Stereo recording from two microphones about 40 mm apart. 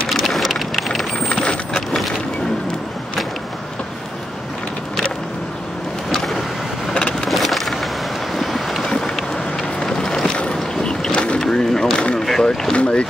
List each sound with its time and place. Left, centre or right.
0.1 s vehicle: centre
1.3 s a sound: left
1.7 s coin: centre
6.1 s vehicle: centre
8.4 s boat: centre
8.8 s vehicle: centre
9.8 s boat: centre
11.3 s a sound: centre
12.2 s boat: centre
12.7 s boat: left